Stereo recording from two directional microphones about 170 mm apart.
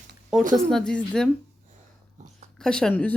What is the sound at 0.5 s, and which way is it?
Speech, 5° left (ahead or behind).